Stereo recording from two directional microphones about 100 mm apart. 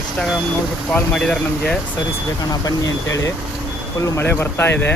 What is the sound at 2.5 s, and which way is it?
Speech, 35° left (ahead or behind).